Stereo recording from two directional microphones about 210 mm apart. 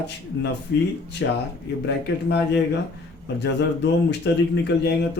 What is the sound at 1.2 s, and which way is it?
Speech, 60° left (ahead or behind).